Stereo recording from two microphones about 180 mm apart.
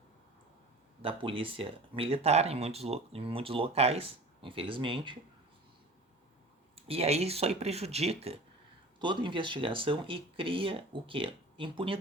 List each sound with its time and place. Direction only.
1.0 s speech: 30° right (ahead or behind)
6.7 s speech: 30° right (ahead or behind)